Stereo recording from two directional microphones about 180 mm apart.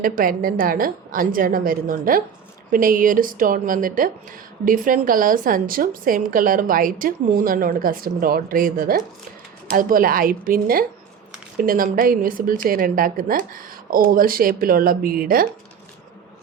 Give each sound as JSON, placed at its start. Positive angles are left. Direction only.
{"t": 0.0, "sound": "speech", "side_deg": -50}